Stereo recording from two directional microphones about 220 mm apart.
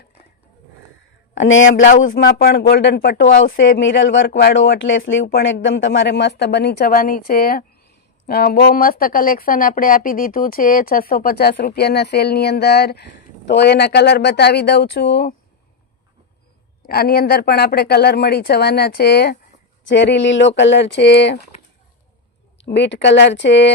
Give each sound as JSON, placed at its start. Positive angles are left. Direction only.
{"t": 1.4, "sound": "speech", "side_deg": 60}
{"t": 1.8, "sound": "speech", "side_deg": 35}
{"t": 3.6, "sound": "speech", "side_deg": 55}
{"t": 16.8, "sound": "speech", "side_deg": 45}
{"t": 22.5, "sound": "speech", "side_deg": 50}